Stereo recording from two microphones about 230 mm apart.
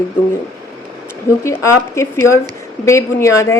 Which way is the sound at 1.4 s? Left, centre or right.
Centre.